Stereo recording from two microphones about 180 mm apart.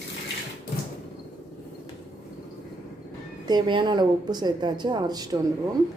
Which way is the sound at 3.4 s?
25° right (ahead or behind).